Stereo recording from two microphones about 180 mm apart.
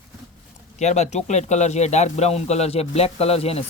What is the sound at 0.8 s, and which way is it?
Speech, 40° left (ahead or behind).